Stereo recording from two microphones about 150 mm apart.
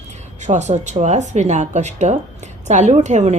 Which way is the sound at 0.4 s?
50° right (ahead or behind).